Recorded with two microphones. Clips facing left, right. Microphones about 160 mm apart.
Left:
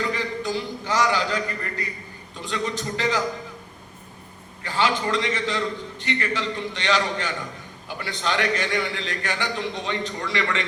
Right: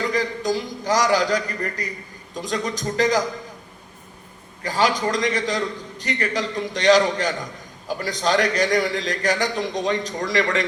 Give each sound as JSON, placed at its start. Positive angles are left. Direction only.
{"t": 0.1, "sound": "a man's voice", "side_deg": -40}
{"t": 4.6, "sound": "a man's voice", "side_deg": -40}